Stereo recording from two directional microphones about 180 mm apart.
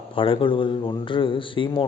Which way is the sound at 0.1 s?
30° left (ahead or behind).